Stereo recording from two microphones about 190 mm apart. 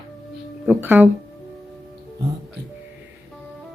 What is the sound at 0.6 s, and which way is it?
Speech, 10° right (ahead or behind).